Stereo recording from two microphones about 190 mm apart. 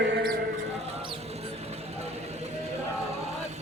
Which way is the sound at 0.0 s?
60° right (ahead or behind).